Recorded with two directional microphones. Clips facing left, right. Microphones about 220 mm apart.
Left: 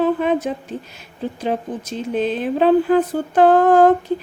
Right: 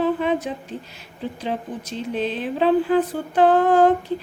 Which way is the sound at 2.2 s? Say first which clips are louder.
Left 5 dB; 50° left (ahead or behind).